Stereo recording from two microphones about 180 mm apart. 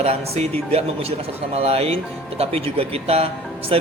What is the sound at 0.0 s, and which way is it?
Speech, 35° right (ahead or behind).